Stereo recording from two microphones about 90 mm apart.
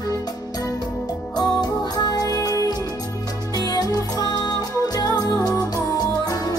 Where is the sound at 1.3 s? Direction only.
50° left (ahead or behind).